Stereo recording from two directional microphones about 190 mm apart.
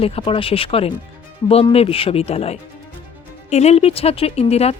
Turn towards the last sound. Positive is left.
turn(degrees=35)  # may be behind; listen again after turning